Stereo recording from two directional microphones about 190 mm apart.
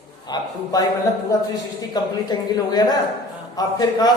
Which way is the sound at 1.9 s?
20° left (ahead or behind).